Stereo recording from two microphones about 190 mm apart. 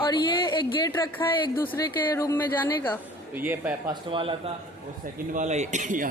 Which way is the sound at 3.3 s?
10° right (ahead or behind).